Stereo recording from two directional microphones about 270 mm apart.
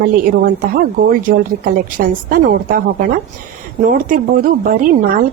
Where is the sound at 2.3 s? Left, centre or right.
Right.